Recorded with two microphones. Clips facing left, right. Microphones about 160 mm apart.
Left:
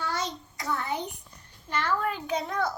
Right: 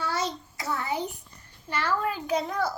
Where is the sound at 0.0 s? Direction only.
10° right (ahead or behind).